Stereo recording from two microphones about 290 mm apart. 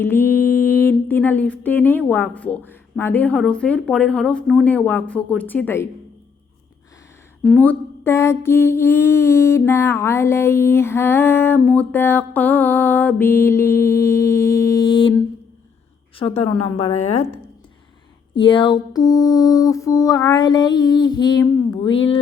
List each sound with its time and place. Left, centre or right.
0.0 s a sound: centre
7.4 s mantra: centre
16.7 s a woman's voice: left
18.3 s mantra: centre